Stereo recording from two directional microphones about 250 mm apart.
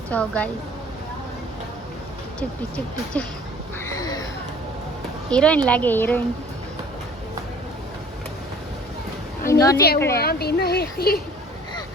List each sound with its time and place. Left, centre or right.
0.1 s a woman's voice: centre
3.1 s a woman's voice: centre
3.8 s a sound: centre
5.3 s a woman's voice: centre
9.5 s a woman's voice: centre
10.2 s speech: left